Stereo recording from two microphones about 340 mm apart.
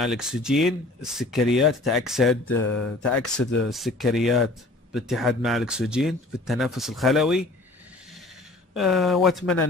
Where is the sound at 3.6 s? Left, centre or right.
Centre.